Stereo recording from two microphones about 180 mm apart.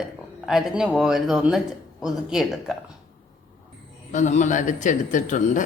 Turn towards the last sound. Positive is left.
turn(degrees=45)  # may be behind; listen again after turning